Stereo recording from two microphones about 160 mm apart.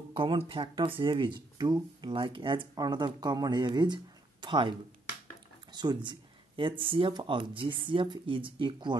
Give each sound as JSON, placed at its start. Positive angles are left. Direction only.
{"t": 0.1, "sound": "speech", "side_deg": -30}
{"t": 5.7, "sound": "a sound", "side_deg": -25}
{"t": 6.9, "sound": "speech", "side_deg": -30}